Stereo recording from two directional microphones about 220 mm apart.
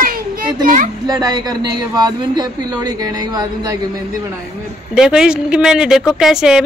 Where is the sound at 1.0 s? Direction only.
15° right (ahead or behind).